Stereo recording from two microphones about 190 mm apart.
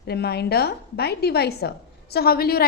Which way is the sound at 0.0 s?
60° left (ahead or behind).